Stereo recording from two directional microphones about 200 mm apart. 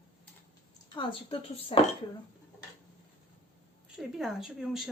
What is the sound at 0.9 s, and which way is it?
Speech, 25° left (ahead or behind).